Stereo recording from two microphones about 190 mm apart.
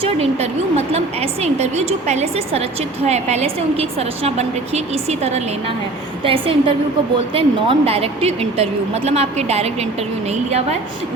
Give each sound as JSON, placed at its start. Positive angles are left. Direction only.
{"t": 0.0, "sound": "a woman's voice", "side_deg": -30}